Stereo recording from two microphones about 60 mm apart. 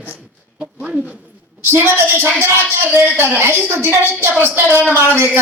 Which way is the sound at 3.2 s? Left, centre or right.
Right.